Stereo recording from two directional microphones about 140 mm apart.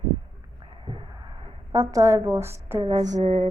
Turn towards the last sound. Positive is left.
turn(degrees=-50)  # may be behind; listen again after turning